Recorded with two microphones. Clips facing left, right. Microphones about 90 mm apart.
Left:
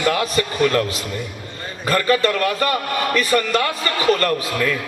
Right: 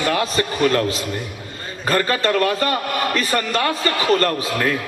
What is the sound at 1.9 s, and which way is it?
Speech, 35° right (ahead or behind).